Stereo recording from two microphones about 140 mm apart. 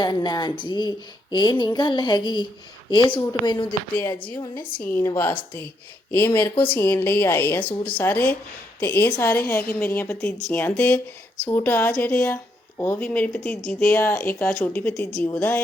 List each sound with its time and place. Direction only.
0.0 s speech: 30° left (ahead or behind)
5.0 s a woman's voice: 20° left (ahead or behind)